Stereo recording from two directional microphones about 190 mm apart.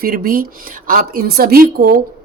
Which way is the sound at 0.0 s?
50° right (ahead or behind).